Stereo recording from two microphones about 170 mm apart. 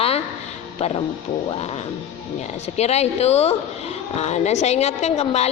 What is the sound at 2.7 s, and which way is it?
Speech, 40° left (ahead or behind).